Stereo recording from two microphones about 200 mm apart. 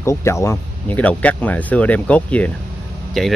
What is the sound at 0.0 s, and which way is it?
Speech, 15° left (ahead or behind).